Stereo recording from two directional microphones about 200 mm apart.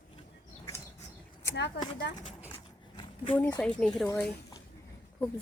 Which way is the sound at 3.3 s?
10° left (ahead or behind).